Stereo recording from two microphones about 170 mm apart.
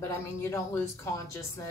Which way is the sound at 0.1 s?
15° left (ahead or behind).